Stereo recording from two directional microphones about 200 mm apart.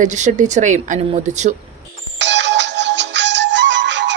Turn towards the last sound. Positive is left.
turn(degrees=-65)  # may be behind; listen again after turning